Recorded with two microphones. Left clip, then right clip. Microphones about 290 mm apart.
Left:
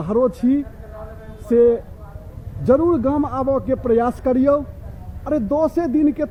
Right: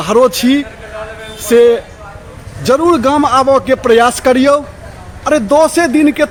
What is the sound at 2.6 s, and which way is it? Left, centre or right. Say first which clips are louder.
Speech: right 6 dB; centre.